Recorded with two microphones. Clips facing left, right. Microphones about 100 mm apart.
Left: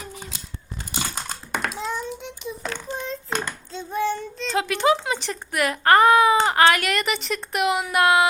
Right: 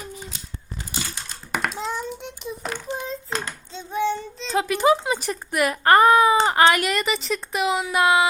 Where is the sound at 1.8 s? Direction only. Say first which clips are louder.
Even; centre (ahead or behind).